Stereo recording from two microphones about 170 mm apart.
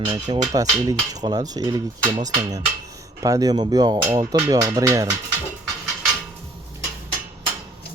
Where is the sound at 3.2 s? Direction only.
20° right (ahead or behind).